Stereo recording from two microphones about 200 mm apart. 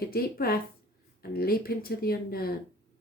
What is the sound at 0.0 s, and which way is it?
Speech, 50° left (ahead or behind).